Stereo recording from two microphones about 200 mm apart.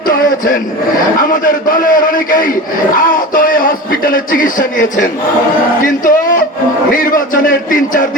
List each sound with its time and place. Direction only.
0.1 s a man's voice: 45° left (ahead or behind)